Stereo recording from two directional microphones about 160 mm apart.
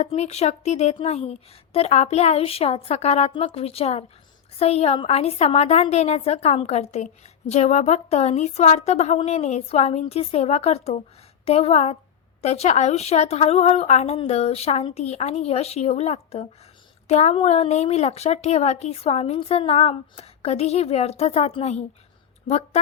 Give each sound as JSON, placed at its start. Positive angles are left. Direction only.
{"t": 0.0, "sound": "a woman's voice", "side_deg": 45}